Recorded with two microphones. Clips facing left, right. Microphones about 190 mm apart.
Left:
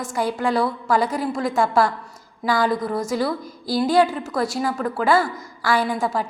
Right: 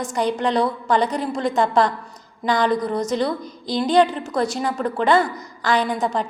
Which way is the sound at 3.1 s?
5° left (ahead or behind).